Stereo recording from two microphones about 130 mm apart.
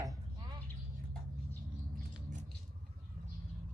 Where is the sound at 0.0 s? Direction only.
25° right (ahead or behind).